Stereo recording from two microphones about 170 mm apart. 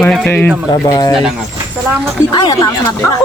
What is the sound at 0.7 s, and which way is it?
Speech, 20° left (ahead or behind).